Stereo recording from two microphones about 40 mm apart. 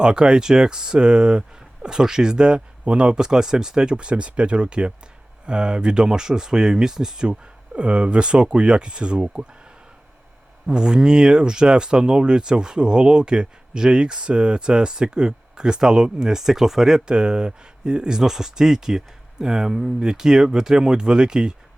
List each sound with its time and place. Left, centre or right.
0.0 s speech: right
7.8 s speech: right
10.7 s speech: centre
17.1 s speech: right